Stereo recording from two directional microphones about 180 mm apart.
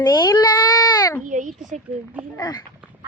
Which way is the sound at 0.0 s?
20° left (ahead or behind).